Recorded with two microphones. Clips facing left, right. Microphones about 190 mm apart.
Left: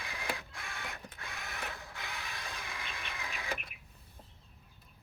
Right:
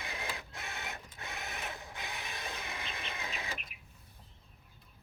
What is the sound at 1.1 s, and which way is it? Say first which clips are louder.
Mechanisms: right 1 dB; 20° right (ahead or behind).